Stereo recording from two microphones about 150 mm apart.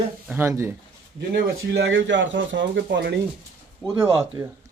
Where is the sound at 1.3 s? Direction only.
90° right.